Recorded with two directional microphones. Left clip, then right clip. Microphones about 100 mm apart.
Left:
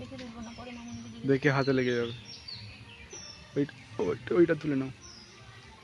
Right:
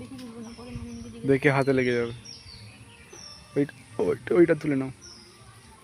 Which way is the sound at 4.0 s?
15° right (ahead or behind).